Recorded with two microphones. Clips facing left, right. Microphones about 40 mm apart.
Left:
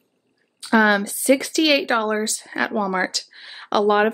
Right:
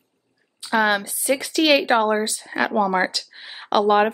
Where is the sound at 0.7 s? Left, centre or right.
Centre.